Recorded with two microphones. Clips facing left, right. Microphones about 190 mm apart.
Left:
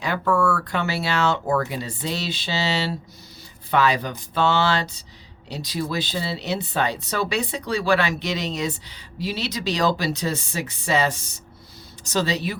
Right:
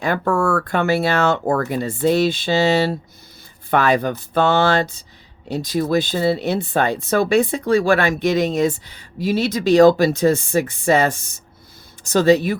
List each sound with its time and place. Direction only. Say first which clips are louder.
0.0 s speech: right 3 dB; 50° right (ahead or behind)